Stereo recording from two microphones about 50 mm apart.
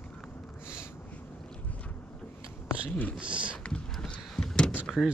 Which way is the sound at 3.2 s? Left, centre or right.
Right.